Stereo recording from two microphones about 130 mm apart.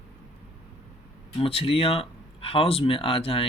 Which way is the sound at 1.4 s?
45° left (ahead or behind).